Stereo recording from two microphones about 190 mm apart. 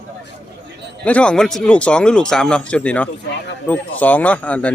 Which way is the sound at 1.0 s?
5° left (ahead or behind).